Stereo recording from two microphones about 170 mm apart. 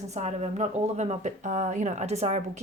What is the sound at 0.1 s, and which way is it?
A woman's voice, 40° right (ahead or behind).